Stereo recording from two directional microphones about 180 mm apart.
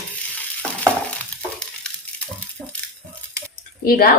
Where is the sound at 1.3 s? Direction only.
5° left (ahead or behind).